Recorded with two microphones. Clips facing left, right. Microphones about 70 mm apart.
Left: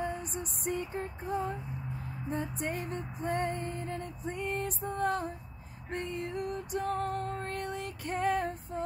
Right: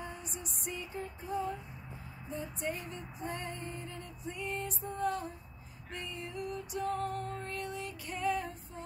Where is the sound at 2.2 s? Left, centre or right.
Left.